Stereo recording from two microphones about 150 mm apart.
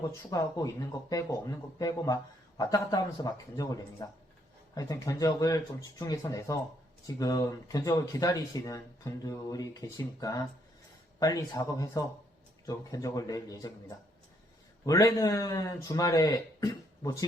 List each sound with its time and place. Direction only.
0.2 s speech: 25° left (ahead or behind)